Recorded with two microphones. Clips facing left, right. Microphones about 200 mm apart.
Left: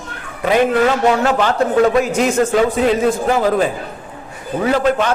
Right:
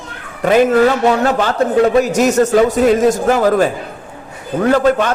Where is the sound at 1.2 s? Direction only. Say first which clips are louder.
Right 1 dB; 35° right (ahead or behind).